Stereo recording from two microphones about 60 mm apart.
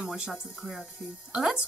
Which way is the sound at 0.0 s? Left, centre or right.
Centre.